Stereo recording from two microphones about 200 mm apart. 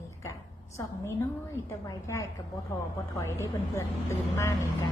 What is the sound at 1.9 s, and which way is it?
A woman's voice, 15° left (ahead or behind).